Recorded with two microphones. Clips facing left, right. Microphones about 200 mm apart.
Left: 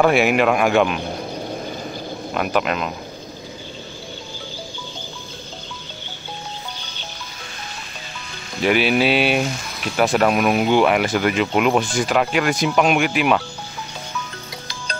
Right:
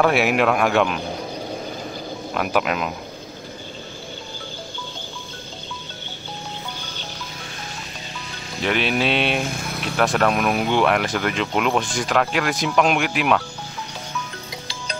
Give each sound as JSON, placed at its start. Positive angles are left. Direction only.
{"t": 0.0, "sound": "speech", "side_deg": 0}
{"t": 2.3, "sound": "speech", "side_deg": 0}
{"t": 8.6, "sound": "speech", "side_deg": 5}
{"t": 9.5, "sound": "speech", "side_deg": -55}
{"t": 9.8, "sound": "speech", "side_deg": 5}